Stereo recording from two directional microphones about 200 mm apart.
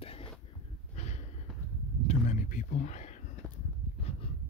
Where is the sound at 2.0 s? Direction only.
40° left (ahead or behind).